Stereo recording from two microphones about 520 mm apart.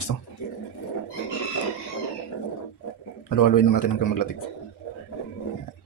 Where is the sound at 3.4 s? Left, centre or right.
Left.